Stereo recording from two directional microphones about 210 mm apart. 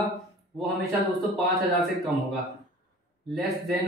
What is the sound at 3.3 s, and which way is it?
Speech, centre (ahead or behind).